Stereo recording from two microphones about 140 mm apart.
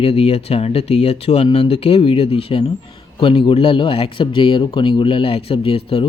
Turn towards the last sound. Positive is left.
turn(degrees=40)  # may be behind; listen again after turning